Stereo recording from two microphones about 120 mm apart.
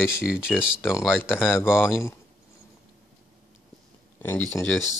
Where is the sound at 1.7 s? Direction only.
20° left (ahead or behind).